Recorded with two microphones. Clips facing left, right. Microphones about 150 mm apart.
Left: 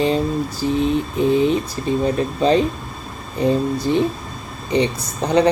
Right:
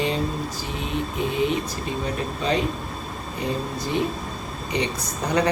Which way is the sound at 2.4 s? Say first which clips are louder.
Left 8 dB; 30° left (ahead or behind).